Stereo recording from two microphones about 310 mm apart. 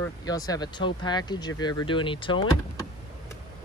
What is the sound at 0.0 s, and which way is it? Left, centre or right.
Speech, centre.